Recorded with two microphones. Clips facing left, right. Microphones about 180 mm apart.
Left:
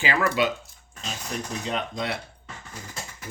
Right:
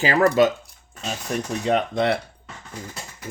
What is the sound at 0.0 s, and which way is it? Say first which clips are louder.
Speech: right 7 dB; 40° right (ahead or behind).